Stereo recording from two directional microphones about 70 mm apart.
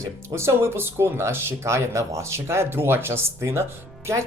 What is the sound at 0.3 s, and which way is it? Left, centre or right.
Speech, right.